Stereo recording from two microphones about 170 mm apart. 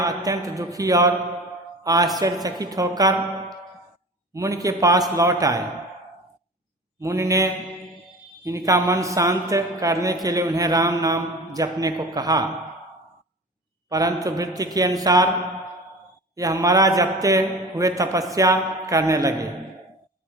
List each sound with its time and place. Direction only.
0.3 s a man's voice: 20° right (ahead or behind)
1.8 s mantra: 20° right (ahead or behind)
2.1 s a man's voice: 20° right (ahead or behind)
4.4 s a man's voice: 20° right (ahead or behind)
7.0 s mantra: 15° right (ahead or behind)
8.4 s a man's voice: 20° right (ahead or behind)
13.9 s a man's voice: 20° right (ahead or behind)
16.3 s a man's voice: 20° right (ahead or behind)